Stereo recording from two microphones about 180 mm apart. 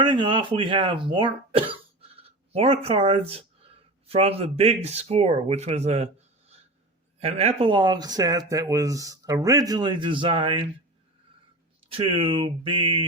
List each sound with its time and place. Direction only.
0.0 s speech: 25° right (ahead or behind)
7.2 s speech: 35° right (ahead or behind)
11.9 s speech: 30° right (ahead or behind)